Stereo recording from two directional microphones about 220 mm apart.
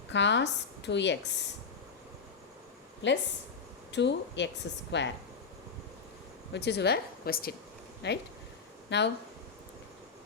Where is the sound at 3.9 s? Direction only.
55° left (ahead or behind).